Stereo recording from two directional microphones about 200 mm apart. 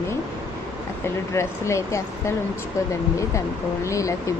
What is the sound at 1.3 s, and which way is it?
Speech, 15° left (ahead or behind).